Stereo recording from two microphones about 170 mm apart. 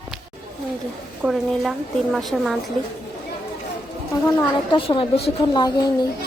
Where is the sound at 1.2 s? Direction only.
Centre (ahead or behind).